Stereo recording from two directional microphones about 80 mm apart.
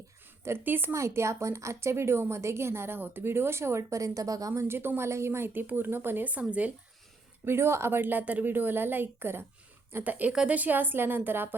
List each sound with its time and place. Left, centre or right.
0.4 s a woman's voice: right
0.9 s a woman's voice: right
4.7 s a woman's voice: right
7.4 s a woman's voice: right